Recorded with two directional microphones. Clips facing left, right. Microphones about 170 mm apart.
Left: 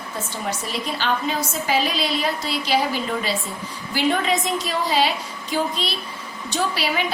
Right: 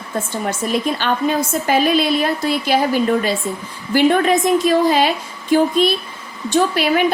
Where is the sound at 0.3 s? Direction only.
50° right (ahead or behind).